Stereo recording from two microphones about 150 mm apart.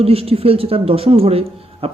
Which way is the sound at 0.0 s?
40° right (ahead or behind).